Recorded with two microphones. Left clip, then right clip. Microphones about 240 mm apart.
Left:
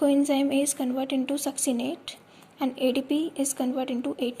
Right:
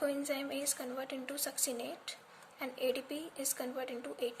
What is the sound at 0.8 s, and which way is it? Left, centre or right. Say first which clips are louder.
A woman's voice: left 13 dB; centre.